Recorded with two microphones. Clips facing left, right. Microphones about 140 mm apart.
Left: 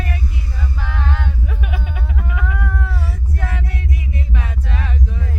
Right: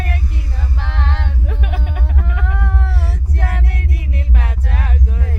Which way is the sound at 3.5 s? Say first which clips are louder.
Right 2 dB; 45° right (ahead or behind).